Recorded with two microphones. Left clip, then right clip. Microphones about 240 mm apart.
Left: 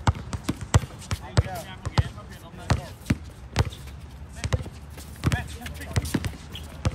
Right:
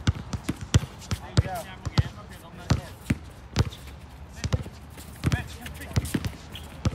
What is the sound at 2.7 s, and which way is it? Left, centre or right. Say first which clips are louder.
Basketball bounce: left 2 dB; left.